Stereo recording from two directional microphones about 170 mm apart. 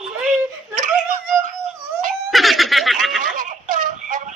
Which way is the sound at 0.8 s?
50° right (ahead or behind).